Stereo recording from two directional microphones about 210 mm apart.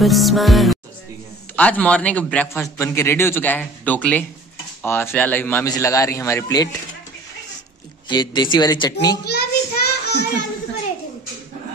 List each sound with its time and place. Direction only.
0.0 s music: centre (ahead or behind)
1.6 s a man's voice: 5° left (ahead or behind)
8.1 s speech: 20° left (ahead or behind)
9.2 s child singing: 50° left (ahead or behind)